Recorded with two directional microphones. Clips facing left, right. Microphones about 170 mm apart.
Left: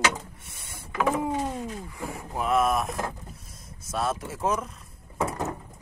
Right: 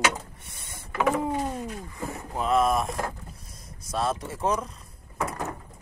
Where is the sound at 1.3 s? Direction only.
10° right (ahead or behind).